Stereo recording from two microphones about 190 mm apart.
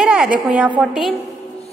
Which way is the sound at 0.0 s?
5° right (ahead or behind).